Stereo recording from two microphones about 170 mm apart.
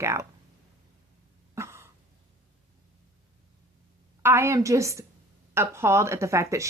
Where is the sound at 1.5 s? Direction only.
15° right (ahead or behind).